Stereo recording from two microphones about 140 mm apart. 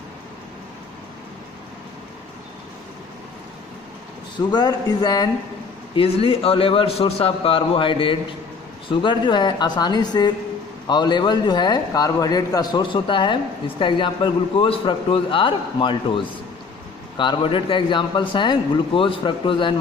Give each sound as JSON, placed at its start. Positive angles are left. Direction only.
{"t": 4.5, "sound": "speech", "side_deg": 30}
{"t": 5.9, "sound": "a man's voice", "side_deg": 45}
{"t": 17.2, "sound": "a man's voice", "side_deg": 35}